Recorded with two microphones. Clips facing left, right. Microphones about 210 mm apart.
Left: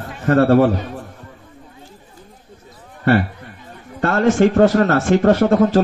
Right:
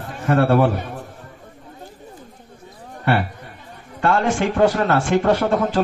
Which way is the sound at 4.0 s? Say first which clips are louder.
Left 4 dB; 50° left (ahead or behind).